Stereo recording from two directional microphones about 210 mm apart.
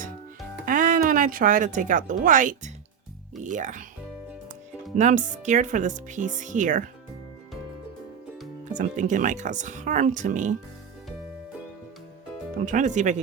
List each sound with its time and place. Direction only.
0.6 s speech: 40° right (ahead or behind)
4.9 s speech: 35° right (ahead or behind)
8.7 s speech: 35° right (ahead or behind)
12.6 s speech: 35° right (ahead or behind)